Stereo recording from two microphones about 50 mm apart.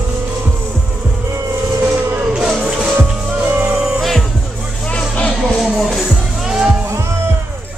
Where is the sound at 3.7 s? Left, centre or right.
Right.